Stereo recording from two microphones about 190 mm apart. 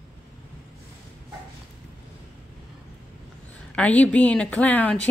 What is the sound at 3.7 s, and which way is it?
Speech, 5° left (ahead or behind).